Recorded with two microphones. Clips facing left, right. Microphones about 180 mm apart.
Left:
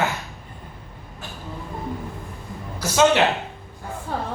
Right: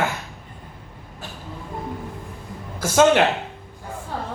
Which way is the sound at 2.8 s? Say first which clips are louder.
Right 2 dB; 50° right (ahead or behind).